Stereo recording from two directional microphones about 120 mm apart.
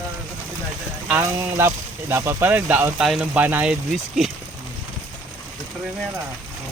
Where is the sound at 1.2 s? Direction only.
20° right (ahead or behind).